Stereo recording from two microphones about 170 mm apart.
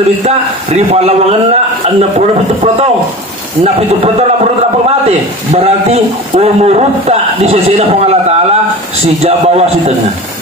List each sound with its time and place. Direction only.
0.2 s a man's voice: 40° right (ahead or behind)